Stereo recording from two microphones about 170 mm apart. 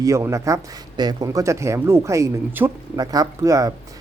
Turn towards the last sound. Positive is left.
turn(degrees=-20)  # may be behind; listen again after turning